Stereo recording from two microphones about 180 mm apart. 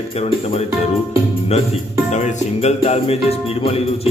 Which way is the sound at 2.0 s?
40° left (ahead or behind).